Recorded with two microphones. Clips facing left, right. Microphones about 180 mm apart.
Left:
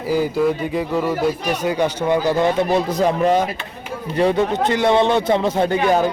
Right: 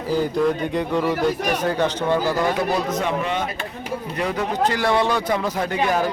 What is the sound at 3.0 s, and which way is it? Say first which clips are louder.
Speech: left 7 dB; 35° left (ahead or behind).